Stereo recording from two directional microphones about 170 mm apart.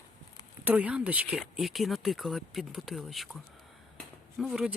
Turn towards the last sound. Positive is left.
turn(degrees=-5)  # may be behind; listen again after turning